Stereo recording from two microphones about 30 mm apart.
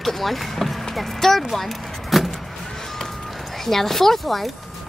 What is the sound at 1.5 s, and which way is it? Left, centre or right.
Vehicle, centre.